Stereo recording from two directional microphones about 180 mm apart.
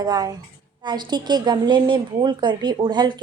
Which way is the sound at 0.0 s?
20° right (ahead or behind).